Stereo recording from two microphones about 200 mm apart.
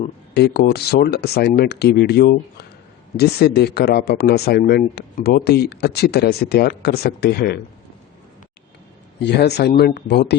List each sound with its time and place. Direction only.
0.3 s speech: 55° left (ahead or behind)
9.2 s speech: 55° left (ahead or behind)